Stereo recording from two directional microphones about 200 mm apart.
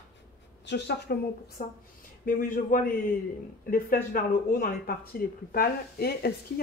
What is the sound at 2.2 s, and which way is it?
A man's voice, 45° left (ahead or behind).